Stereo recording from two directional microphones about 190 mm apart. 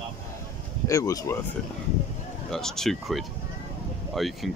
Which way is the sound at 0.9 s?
15° left (ahead or behind).